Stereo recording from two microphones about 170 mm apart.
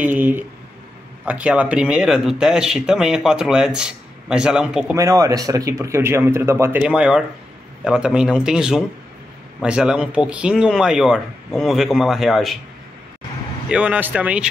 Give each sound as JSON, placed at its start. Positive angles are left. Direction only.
{"t": 0.0, "sound": "speech", "side_deg": -10}
{"t": 4.9, "sound": "speech", "side_deg": -20}
{"t": 13.7, "sound": "speech", "side_deg": -5}